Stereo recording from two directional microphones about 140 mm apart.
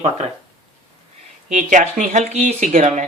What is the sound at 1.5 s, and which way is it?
Speech, 65° right (ahead or behind).